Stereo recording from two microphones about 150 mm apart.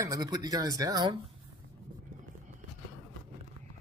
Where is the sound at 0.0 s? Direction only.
25° right (ahead or behind).